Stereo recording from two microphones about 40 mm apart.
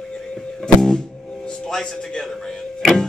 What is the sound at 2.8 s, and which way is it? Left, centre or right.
Music, centre.